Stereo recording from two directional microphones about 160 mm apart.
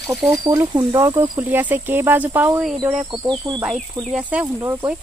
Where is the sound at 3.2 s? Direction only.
25° right (ahead or behind).